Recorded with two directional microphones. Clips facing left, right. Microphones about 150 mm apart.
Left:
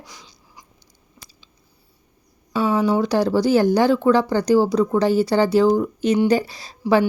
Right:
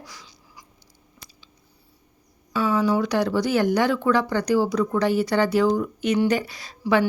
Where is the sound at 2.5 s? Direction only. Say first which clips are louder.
Left 3 dB; 20° left (ahead or behind).